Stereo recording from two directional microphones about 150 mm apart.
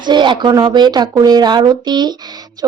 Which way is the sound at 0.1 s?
30° right (ahead or behind).